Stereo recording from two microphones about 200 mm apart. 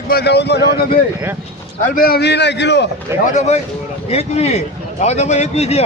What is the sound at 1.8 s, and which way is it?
A man's voice, 45° left (ahead or behind).